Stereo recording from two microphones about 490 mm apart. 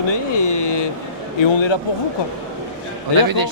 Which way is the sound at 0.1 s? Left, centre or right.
Left.